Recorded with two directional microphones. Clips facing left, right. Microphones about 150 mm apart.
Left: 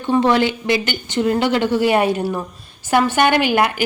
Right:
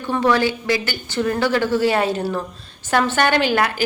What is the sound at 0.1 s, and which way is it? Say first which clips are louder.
A woman's voice: left 3 dB; 20° left (ahead or behind).